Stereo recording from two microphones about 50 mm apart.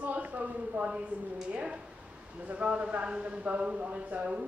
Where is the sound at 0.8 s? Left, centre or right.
Centre.